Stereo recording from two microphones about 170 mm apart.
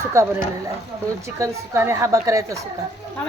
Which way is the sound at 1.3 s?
15° right (ahead or behind).